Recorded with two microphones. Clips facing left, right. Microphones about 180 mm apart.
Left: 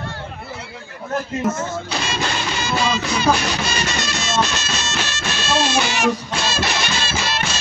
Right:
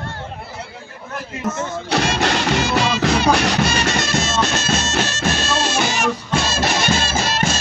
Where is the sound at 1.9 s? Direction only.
65° right (ahead or behind).